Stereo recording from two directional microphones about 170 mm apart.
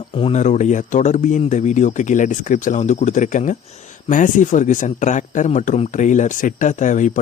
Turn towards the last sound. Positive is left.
turn(degrees=45)  # may be behind; listen again after turning